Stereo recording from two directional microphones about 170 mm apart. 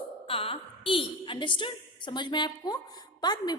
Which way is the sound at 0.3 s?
35° left (ahead or behind).